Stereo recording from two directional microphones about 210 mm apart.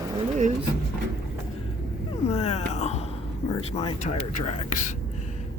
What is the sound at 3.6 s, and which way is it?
Speech, 30° left (ahead or behind).